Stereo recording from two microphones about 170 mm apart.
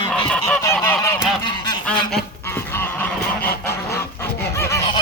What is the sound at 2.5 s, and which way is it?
Goose, 15° left (ahead or behind).